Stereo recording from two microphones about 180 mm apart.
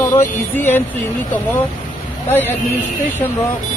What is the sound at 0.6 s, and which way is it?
Speech, 10° left (ahead or behind).